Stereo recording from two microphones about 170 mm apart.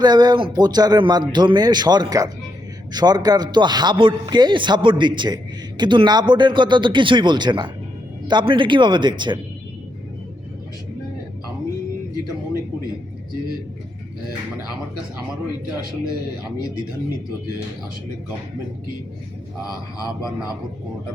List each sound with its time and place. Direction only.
0.0 s a man's voice: 25° right (ahead or behind)